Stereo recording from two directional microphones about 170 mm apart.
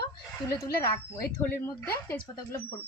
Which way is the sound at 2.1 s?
15° left (ahead or behind).